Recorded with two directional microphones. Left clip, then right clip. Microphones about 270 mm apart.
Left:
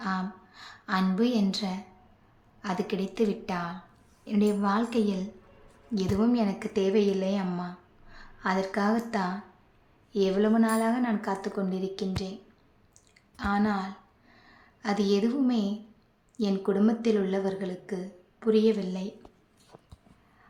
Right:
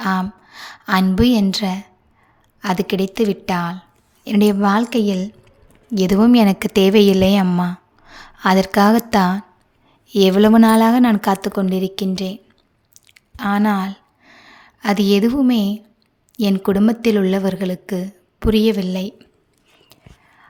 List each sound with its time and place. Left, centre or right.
0.0 s a woman's voice: right
12.9 s chewing: right
16.4 s a woman's voice: right